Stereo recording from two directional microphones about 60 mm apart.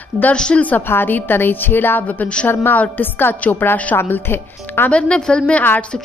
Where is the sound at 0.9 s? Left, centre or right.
Left.